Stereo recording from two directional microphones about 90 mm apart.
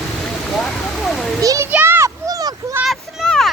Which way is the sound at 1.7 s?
25° right (ahead or behind).